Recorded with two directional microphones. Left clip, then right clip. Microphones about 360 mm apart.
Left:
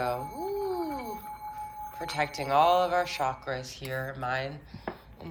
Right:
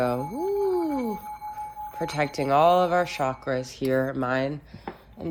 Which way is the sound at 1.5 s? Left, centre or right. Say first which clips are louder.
Right 5 dB; centre.